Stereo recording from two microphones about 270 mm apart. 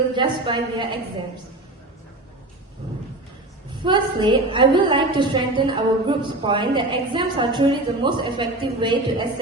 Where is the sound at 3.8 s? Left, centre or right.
Centre.